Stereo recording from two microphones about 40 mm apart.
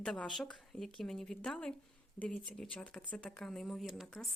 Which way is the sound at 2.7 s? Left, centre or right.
Left.